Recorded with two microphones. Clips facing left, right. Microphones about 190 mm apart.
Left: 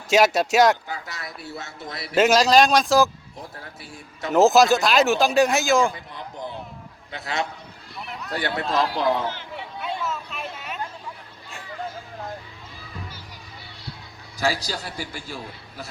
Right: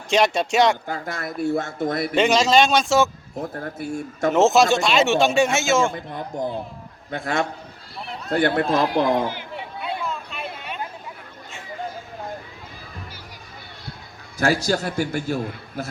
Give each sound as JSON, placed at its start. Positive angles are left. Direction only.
{"t": 0.1, "sound": "speech", "side_deg": 5}
{"t": 0.9, "sound": "a man's voice", "side_deg": -50}
{"t": 2.1, "sound": "speech", "side_deg": 0}
{"t": 3.4, "sound": "a man's voice", "side_deg": -50}
{"t": 4.3, "sound": "speech", "side_deg": 0}
{"t": 5.9, "sound": "a man's voice", "side_deg": -50}
{"t": 7.9, "sound": "run", "side_deg": -30}
{"t": 8.3, "sound": "a man's voice", "side_deg": -55}
{"t": 9.2, "sound": "a sound", "side_deg": -10}
{"t": 14.3, "sound": "a man's voice", "side_deg": -50}